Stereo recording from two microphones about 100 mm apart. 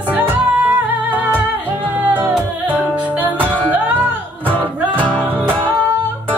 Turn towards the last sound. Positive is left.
turn(degrees=10)  # may be behind; listen again after turning